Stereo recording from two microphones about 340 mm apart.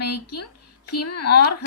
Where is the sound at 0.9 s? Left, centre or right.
Left.